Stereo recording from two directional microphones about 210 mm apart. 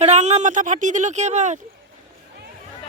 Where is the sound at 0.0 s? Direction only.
30° right (ahead or behind).